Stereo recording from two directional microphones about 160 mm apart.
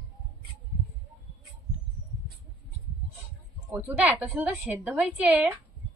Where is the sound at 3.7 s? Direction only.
10° right (ahead or behind).